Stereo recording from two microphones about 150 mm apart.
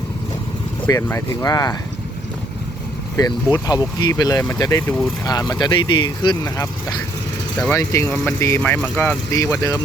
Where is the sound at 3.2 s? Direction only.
25° left (ahead or behind).